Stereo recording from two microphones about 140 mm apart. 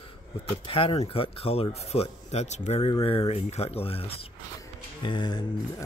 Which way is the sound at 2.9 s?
40° left (ahead or behind).